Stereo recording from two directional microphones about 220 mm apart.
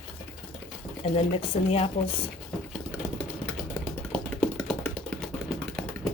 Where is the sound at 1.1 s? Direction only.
25° left (ahead or behind).